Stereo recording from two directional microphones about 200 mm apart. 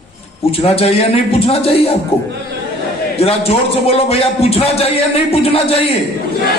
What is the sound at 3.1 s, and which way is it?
A man's voice, 30° left (ahead or behind).